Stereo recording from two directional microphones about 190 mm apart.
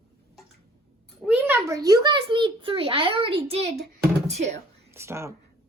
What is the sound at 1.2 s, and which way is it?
A child's voice, 10° right (ahead or behind).